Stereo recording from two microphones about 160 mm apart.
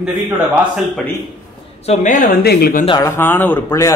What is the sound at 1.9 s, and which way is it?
Speech, 50° left (ahead or behind).